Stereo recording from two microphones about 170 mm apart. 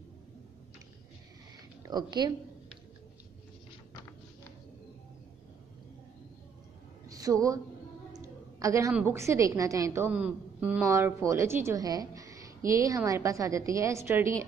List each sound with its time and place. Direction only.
1.9 s a woman's voice: 25° right (ahead or behind)
7.1 s a woman's voice: 20° right (ahead or behind)
8.1 s a sound: 20° right (ahead or behind)
8.9 s a woman's voice: 15° right (ahead or behind)